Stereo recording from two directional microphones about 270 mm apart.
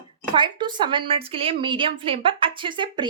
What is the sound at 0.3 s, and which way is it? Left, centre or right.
A woman's voice, centre.